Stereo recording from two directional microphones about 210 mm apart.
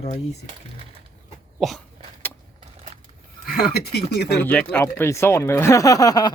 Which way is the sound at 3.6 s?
50° left (ahead or behind).